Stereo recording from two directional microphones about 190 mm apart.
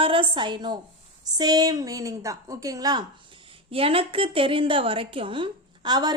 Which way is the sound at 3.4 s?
30° right (ahead or behind).